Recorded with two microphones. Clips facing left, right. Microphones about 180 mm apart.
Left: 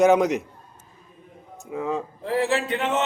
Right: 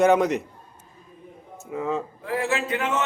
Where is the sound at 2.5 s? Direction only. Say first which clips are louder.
Left 2 dB; 30° left (ahead or behind).